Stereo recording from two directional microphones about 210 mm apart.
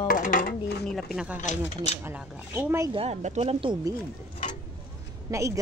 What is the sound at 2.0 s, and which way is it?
Speech, 5° right (ahead or behind).